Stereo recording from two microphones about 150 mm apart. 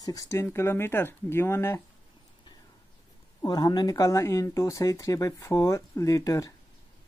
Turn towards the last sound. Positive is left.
turn(degrees=20)  # may be behind; listen again after turning